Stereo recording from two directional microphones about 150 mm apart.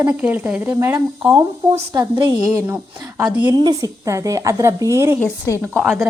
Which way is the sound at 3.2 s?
10° right (ahead or behind).